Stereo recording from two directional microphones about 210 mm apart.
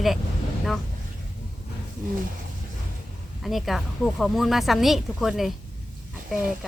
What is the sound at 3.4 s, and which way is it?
Speech, centre (ahead or behind).